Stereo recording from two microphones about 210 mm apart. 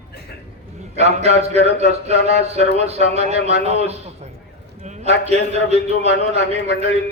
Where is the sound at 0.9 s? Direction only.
30° right (ahead or behind).